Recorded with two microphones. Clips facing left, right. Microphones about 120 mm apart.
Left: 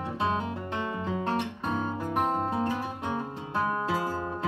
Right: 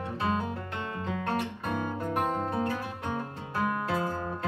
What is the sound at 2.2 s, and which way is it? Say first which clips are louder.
Guitar: left 3 dB; 25° left (ahead or behind).